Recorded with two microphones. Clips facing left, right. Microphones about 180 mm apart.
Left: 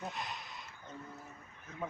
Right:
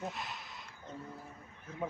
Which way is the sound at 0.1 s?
Centre (ahead or behind).